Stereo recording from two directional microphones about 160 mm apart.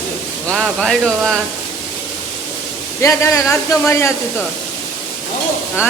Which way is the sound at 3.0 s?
15° left (ahead or behind).